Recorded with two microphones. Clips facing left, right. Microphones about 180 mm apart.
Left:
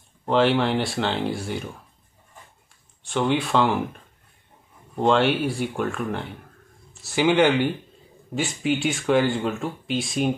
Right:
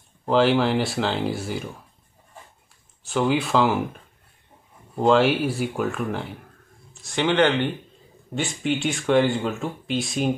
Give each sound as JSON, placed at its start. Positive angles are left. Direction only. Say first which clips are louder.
{"t": 0.2, "sound": "speech", "louder": "right 1 dB", "side_deg": 0}
{"t": 3.0, "sound": "speech", "louder": "right 1 dB", "side_deg": 0}